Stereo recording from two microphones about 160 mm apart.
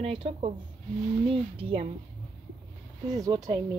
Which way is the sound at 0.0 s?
35° right (ahead or behind).